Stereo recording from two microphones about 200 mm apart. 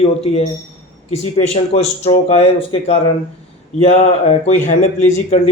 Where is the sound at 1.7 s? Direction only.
30° left (ahead or behind).